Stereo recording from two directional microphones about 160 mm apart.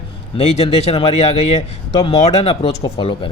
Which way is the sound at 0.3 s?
40° left (ahead or behind).